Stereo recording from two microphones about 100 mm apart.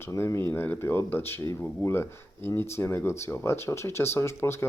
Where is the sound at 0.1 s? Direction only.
30° left (ahead or behind).